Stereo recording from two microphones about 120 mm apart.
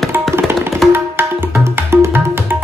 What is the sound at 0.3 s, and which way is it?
Tabla, 20° right (ahead or behind).